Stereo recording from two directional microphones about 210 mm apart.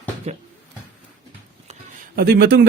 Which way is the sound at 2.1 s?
45° right (ahead or behind).